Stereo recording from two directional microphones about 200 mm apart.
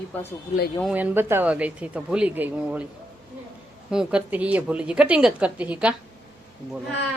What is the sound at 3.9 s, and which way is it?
A woman's voice, 5° right (ahead or behind).